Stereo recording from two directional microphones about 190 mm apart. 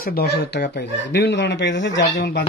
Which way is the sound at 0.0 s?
55° left (ahead or behind).